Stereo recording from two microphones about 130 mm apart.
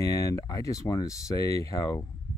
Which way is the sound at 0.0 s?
25° left (ahead or behind).